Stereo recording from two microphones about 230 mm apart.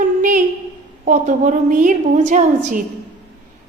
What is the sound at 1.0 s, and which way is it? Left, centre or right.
A woman's voice, right.